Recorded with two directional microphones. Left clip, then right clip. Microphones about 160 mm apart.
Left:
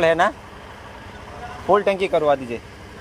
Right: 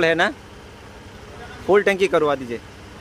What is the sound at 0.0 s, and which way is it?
Speech, 20° right (ahead or behind).